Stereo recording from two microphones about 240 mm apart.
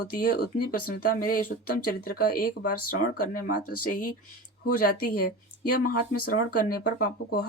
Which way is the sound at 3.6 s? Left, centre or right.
Left.